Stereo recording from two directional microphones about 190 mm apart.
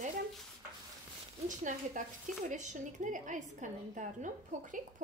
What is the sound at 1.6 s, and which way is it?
A woman's voice, 40° right (ahead or behind).